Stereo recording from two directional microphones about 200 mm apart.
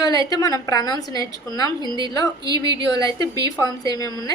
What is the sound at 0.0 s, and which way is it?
A woman's voice, 15° left (ahead or behind).